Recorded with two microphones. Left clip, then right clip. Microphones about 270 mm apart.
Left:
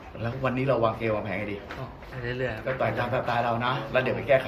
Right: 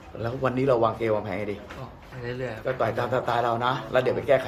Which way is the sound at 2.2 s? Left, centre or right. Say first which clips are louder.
Even; centre.